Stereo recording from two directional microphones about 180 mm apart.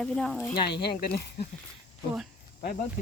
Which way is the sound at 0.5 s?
65° left (ahead or behind).